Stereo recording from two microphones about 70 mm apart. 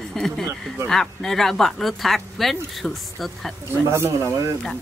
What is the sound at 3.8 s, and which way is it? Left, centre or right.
Speech, right.